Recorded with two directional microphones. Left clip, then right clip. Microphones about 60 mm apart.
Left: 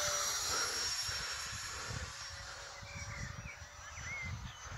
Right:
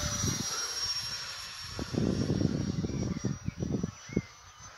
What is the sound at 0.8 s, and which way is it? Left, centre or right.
Vehicle, right.